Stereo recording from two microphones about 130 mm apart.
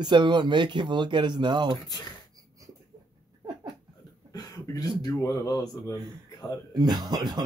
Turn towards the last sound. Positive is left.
turn(degrees=-30)  # may be behind; listen again after turning